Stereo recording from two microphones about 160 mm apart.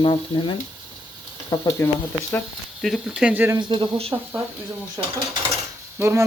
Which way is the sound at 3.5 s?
30° right (ahead or behind).